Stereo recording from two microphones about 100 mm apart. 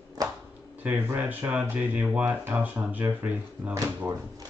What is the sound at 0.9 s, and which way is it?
Speech, 20° right (ahead or behind).